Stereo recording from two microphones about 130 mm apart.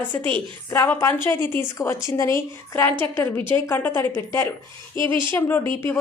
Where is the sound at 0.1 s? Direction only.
15° left (ahead or behind).